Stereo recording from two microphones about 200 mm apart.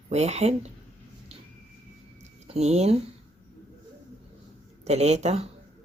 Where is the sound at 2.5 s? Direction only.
35° right (ahead or behind).